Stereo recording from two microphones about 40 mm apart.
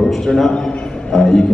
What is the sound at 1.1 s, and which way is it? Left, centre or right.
Speech, centre.